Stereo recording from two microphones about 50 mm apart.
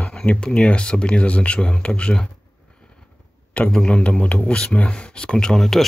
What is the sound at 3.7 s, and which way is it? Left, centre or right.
Speech, left.